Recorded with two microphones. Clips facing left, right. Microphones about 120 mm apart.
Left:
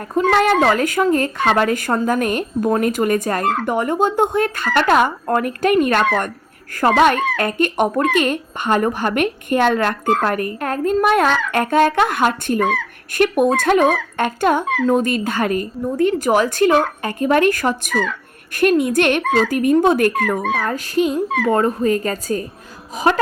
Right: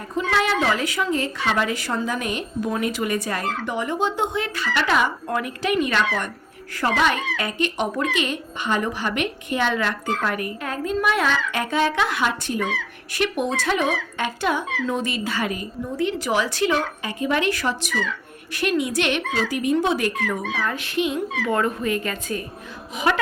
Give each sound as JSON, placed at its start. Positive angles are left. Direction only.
{"t": 0.1, "sound": "speech", "side_deg": 50}
{"t": 21.5, "sound": "a woman's voice", "side_deg": 35}